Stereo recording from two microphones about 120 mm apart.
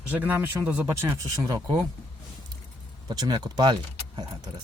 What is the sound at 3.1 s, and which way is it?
Speech, 35° right (ahead or behind).